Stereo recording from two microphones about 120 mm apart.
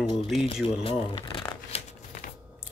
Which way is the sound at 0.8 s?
50° left (ahead or behind).